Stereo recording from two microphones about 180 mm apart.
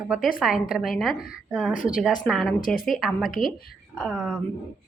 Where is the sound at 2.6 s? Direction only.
50° left (ahead or behind).